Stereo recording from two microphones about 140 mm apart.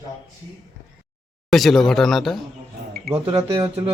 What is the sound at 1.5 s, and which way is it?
Speech, centre (ahead or behind).